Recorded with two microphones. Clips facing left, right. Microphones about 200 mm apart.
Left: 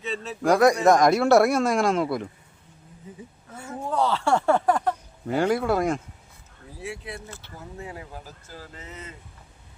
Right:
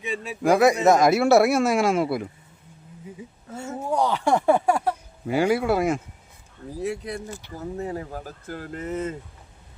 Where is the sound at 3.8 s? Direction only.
15° right (ahead or behind).